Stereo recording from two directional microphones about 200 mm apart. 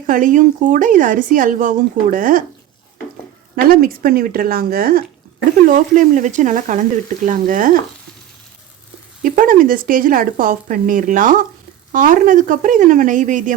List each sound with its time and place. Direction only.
0.1 s speech: 40° right (ahead or behind)
3.5 s speech: 45° right (ahead or behind)
9.2 s speech: 40° right (ahead or behind)